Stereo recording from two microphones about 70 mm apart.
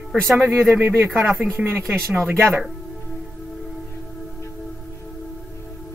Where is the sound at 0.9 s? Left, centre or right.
Right.